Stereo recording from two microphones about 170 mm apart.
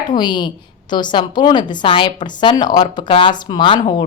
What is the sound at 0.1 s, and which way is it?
A woman's voice, 25° left (ahead or behind).